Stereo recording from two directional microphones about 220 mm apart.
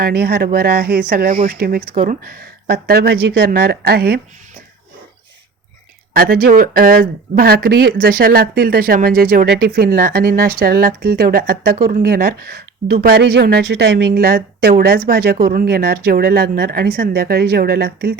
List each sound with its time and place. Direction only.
0.0 s speech: 45° right (ahead or behind)
6.1 s speech: 40° right (ahead or behind)